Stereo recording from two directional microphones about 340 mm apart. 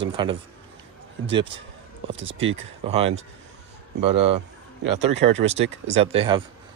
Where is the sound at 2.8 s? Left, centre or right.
Centre.